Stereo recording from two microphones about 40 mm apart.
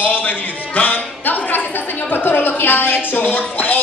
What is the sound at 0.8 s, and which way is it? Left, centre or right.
Music, left.